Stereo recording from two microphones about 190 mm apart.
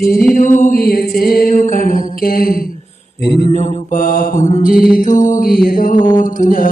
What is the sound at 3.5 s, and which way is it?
Music, 40° left (ahead or behind).